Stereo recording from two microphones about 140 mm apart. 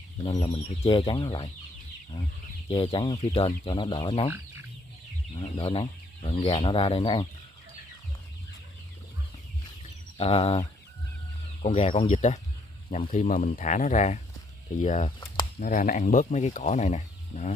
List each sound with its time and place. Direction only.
0.4 s speech: 35° left (ahead or behind)
2.7 s speech: 35° left (ahead or behind)
5.3 s speech: 40° left (ahead or behind)
10.1 s speech: 45° left (ahead or behind)
11.6 s speech: 50° left (ahead or behind)
13.1 s speech: 65° left (ahead or behind)
15.6 s speech: 70° left (ahead or behind)